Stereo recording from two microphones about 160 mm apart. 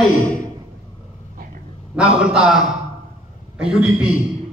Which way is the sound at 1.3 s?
60° right (ahead or behind).